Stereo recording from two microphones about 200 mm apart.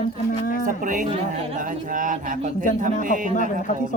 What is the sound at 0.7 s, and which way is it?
Speech, 40° right (ahead or behind).